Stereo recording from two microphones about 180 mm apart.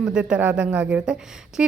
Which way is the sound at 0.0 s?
5° right (ahead or behind).